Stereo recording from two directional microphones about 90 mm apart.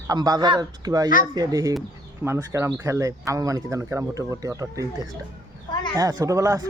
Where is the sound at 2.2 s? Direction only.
30° right (ahead or behind).